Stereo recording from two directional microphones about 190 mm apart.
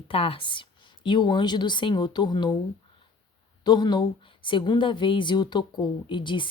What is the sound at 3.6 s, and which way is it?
A woman's voice, 20° left (ahead or behind).